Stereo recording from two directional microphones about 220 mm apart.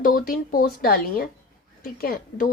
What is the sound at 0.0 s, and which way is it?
Speech, 40° left (ahead or behind).